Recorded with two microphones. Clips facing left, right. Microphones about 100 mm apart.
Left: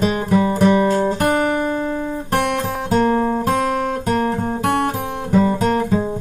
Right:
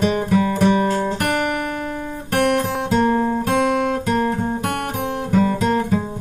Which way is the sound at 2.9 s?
40° left (ahead or behind).